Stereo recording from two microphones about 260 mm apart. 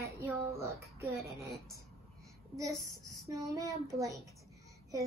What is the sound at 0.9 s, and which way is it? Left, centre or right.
Speech, centre.